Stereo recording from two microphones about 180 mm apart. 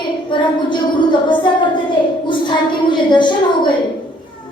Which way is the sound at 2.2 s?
25° left (ahead or behind).